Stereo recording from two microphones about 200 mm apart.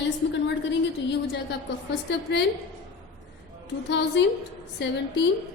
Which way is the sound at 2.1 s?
60° left (ahead or behind).